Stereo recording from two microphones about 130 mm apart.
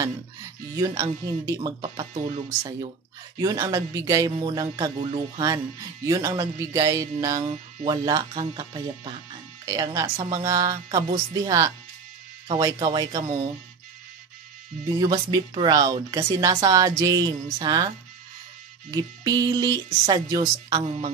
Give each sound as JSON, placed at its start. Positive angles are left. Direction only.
{"t": 0.7, "sound": "speech", "side_deg": -25}
{"t": 3.3, "sound": "speech", "side_deg": -25}
{"t": 4.4, "sound": "speech", "side_deg": -35}
{"t": 15.0, "sound": "speech", "side_deg": -30}
{"t": 18.9, "sound": "speech", "side_deg": -30}